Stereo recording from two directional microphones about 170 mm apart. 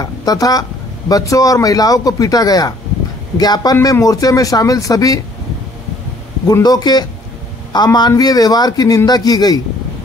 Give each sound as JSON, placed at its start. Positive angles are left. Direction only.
{"t": 0.0, "sound": "speech", "side_deg": 20}
{"t": 6.4, "sound": "speech", "side_deg": 20}